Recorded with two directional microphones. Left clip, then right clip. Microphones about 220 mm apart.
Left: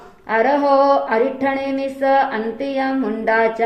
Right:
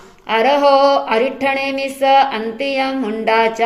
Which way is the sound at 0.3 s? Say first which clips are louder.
Right 3 dB; 35° right (ahead or behind).